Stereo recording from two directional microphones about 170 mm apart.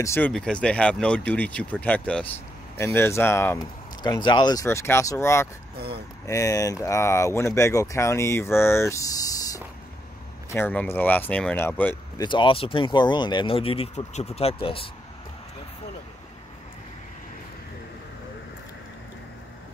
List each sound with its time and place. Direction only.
0.0 s speech: 15° left (ahead or behind)
5.8 s speech: 70° right (ahead or behind)
6.2 s speech: 20° left (ahead or behind)
12.2 s speech: 30° left (ahead or behind)